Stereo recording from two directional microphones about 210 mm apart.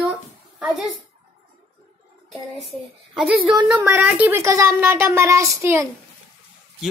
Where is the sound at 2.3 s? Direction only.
Centre (ahead or behind).